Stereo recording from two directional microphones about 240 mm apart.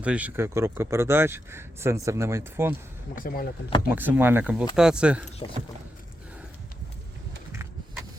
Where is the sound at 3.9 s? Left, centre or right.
Centre.